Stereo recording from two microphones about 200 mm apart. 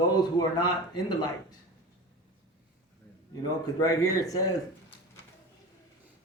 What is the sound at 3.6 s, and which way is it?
Speech, 20° left (ahead or behind).